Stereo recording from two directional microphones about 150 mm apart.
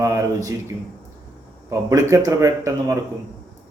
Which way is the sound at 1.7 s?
20° right (ahead or behind).